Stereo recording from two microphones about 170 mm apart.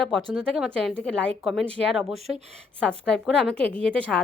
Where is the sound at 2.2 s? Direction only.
40° right (ahead or behind).